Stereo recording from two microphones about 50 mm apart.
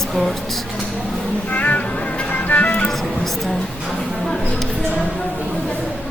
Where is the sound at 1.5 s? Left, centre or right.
Left.